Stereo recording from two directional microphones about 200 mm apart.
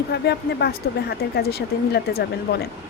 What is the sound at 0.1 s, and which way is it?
A woman's voice, 55° left (ahead or behind).